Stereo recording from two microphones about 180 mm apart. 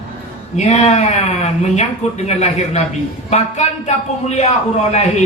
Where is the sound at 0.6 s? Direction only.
40° left (ahead or behind).